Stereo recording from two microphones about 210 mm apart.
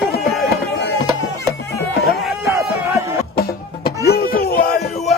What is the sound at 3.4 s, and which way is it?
Music, 45° left (ahead or behind).